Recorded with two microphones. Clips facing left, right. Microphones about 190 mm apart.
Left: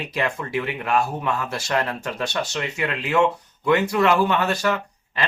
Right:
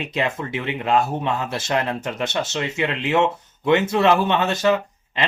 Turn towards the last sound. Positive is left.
turn(degrees=-20)  # may be behind; listen again after turning